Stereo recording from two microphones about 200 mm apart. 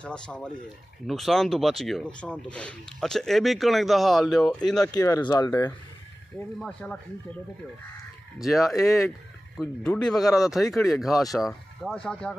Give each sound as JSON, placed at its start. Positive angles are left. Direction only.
{"t": 0.0, "sound": "speech", "side_deg": 5}
{"t": 4.9, "sound": "speech", "side_deg": 20}
{"t": 6.6, "sound": "speech", "side_deg": 5}
{"t": 8.5, "sound": "speech", "side_deg": 0}
{"t": 8.7, "sound": "speech", "side_deg": 15}
{"t": 9.6, "sound": "speech", "side_deg": 5}